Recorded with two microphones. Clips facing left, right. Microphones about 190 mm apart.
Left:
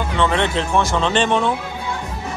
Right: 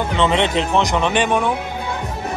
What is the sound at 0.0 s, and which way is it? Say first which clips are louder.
A man's voice: right 2 dB; 20° right (ahead or behind).